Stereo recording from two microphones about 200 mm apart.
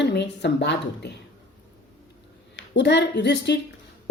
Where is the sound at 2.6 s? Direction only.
60° left (ahead or behind).